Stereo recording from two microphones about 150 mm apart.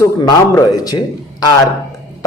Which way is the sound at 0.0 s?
20° left (ahead or behind).